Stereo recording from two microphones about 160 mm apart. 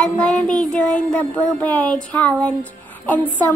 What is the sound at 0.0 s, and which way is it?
Child singing, 5° left (ahead or behind).